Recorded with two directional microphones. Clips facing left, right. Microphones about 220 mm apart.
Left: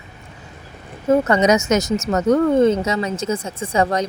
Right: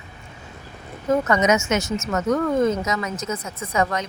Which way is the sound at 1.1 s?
30° left (ahead or behind).